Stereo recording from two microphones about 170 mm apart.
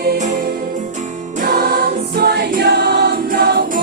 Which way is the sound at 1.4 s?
65° right (ahead or behind).